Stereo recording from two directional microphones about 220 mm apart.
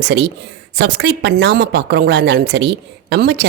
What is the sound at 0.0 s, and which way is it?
A woman's voice, 50° right (ahead or behind).